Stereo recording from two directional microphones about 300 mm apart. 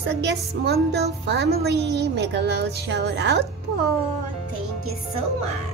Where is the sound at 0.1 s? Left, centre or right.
Right.